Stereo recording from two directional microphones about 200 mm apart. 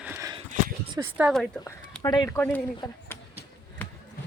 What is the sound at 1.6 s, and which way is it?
Speech, 15° left (ahead or behind).